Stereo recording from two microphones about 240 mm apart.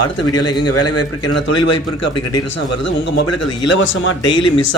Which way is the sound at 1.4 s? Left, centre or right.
Left.